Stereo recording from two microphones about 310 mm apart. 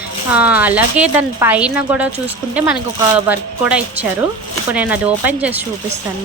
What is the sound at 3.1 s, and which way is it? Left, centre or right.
A woman's voice, centre.